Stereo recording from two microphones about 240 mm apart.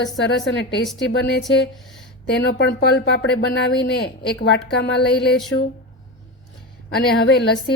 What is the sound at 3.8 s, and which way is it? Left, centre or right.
A woman's voice, left.